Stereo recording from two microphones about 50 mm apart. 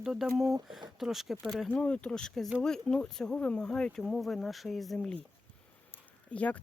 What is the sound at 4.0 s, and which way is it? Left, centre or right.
Speech, centre.